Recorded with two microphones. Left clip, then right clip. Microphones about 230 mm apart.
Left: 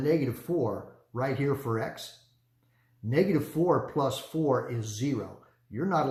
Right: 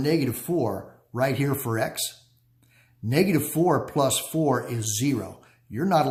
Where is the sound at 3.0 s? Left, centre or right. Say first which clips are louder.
Right 3 dB; right.